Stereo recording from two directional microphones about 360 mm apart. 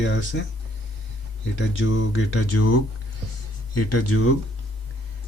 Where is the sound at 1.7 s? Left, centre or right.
Left.